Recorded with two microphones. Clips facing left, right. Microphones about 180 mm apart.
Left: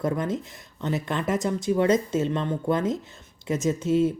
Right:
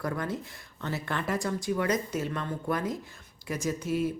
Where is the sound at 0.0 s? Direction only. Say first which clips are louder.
Left 6 dB; 20° left (ahead or behind).